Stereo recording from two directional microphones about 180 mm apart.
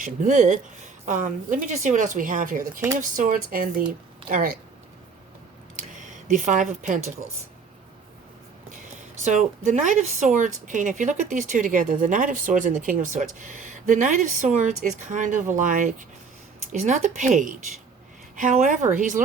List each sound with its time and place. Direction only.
0.0 s speech: 45° right (ahead or behind)
5.9 s speech: 45° right (ahead or behind)
9.7 s speech: 40° right (ahead or behind)